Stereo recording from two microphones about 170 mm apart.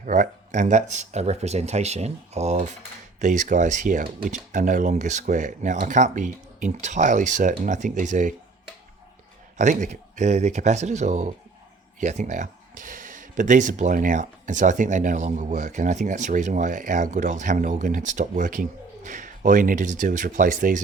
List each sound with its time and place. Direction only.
0.0 s speech: 50° right (ahead or behind)
9.6 s speech: 45° right (ahead or behind)